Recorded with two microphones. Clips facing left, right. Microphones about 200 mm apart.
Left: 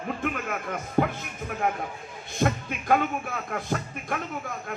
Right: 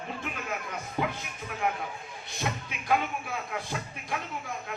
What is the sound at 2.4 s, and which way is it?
A man's voice, 50° left (ahead or behind).